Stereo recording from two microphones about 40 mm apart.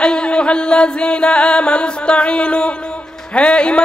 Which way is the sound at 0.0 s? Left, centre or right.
Left.